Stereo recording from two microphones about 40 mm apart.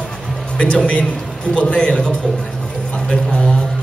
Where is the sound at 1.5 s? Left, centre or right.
Left.